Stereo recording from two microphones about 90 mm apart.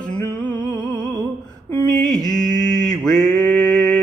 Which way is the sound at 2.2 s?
5° left (ahead or behind).